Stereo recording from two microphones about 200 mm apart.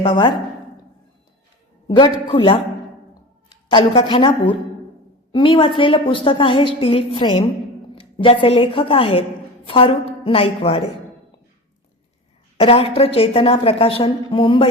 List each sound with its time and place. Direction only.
0.0 s a woman's voice: 25° left (ahead or behind)
2.3 s a woman's voice: 25° left (ahead or behind)
3.7 s a woman's voice: 25° left (ahead or behind)
12.5 s a woman's voice: 30° left (ahead or behind)